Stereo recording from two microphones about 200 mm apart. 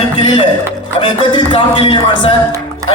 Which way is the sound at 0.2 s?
25° left (ahead or behind).